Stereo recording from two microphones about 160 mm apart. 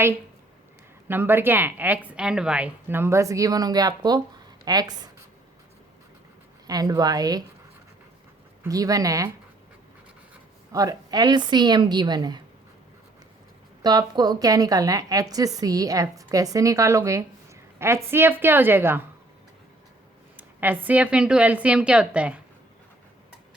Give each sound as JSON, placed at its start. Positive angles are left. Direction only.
{"t": 1.0, "sound": "a woman's voice", "side_deg": -15}
{"t": 6.7, "sound": "a woman's voice", "side_deg": -25}
{"t": 8.6, "sound": "a woman's voice", "side_deg": -20}
{"t": 10.7, "sound": "a woman's voice", "side_deg": -20}
{"t": 13.8, "sound": "a woman's voice", "side_deg": -25}
{"t": 20.3, "sound": "a woman's voice", "side_deg": -10}